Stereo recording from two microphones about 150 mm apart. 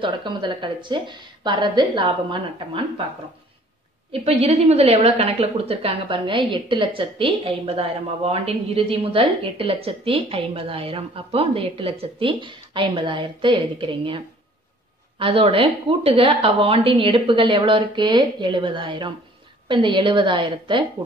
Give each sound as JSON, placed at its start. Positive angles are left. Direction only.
{"t": 0.0, "sound": "a woman's voice", "side_deg": -30}
{"t": 4.1, "sound": "a woman's voice", "side_deg": -40}